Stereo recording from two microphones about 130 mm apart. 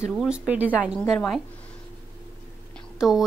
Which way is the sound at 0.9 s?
5° left (ahead or behind).